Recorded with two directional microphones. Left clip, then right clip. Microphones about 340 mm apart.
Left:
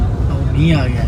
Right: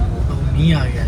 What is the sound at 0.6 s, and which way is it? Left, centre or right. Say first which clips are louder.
Speech: left 3 dB; centre.